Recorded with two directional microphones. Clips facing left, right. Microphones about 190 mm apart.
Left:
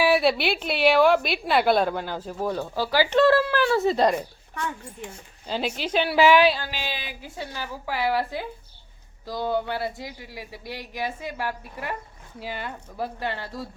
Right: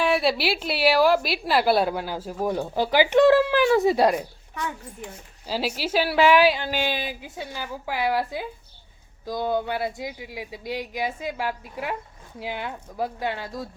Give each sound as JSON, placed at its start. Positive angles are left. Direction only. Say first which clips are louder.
{"t": 0.0, "sound": "a woman's voice", "louder": "left 2 dB", "side_deg": 0}
{"t": 6.7, "sound": "speech", "louder": "right 7 dB", "side_deg": -50}
{"t": 7.2, "sound": "a woman's voice", "louder": "even", "side_deg": -15}